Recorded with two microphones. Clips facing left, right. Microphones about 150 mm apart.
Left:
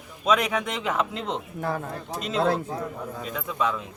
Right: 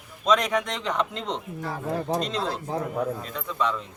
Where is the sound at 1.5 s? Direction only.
55° left (ahead or behind).